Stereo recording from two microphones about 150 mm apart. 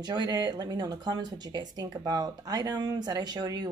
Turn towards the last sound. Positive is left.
turn(degrees=-25)  # may be behind; listen again after turning